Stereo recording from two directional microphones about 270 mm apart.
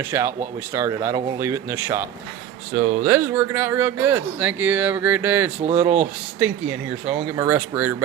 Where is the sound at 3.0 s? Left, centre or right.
Centre.